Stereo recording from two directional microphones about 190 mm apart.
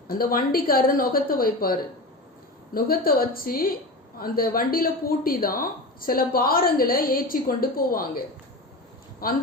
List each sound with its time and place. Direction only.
0.2 s speech: 50° left (ahead or behind)
2.7 s speech: 50° left (ahead or behind)
9.2 s speech: 50° left (ahead or behind)